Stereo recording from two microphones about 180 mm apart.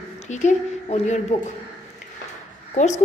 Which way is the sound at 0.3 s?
40° left (ahead or behind).